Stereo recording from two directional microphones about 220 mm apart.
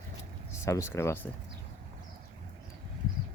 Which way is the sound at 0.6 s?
15° left (ahead or behind).